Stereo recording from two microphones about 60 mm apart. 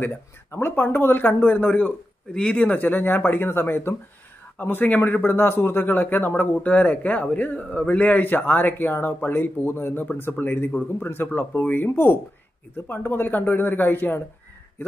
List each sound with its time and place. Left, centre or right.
0.0 s a man's voice: left